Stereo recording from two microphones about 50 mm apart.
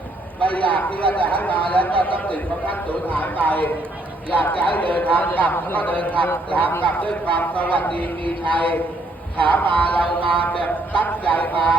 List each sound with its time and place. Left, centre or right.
0.4 s a man's voice: left